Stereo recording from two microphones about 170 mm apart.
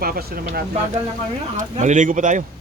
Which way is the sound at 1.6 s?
45° right (ahead or behind).